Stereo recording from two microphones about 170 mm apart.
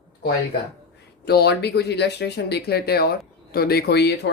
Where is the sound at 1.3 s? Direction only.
70° left (ahead or behind).